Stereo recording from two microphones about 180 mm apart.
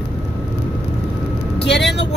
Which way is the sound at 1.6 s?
75° left (ahead or behind).